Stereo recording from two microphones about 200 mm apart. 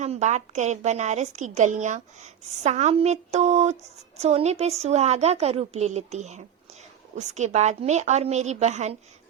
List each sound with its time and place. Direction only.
0.0 s a woman's voice: 35° right (ahead or behind)